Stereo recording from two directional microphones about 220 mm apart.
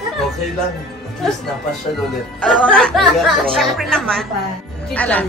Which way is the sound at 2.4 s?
5° left (ahead or behind).